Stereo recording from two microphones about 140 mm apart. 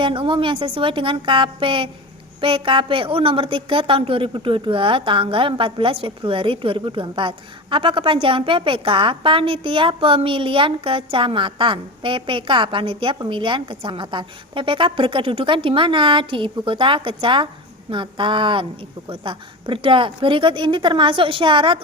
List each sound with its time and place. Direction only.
0.0 s a woman's voice: 35° right (ahead or behind)